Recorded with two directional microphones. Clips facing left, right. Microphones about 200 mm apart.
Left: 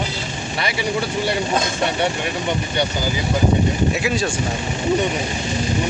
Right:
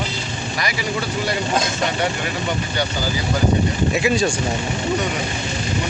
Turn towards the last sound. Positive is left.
turn(degrees=0)  # may be behind; listen again after turning